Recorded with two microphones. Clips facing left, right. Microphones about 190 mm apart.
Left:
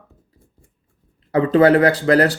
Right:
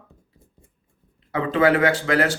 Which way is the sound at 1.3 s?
40° left (ahead or behind).